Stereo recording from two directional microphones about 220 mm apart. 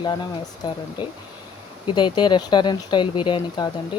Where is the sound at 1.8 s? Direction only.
20° left (ahead or behind).